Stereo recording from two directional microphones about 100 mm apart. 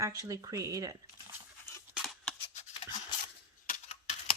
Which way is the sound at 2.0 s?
5° left (ahead or behind).